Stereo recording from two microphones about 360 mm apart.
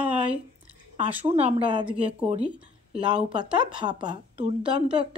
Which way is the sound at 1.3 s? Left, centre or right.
Centre.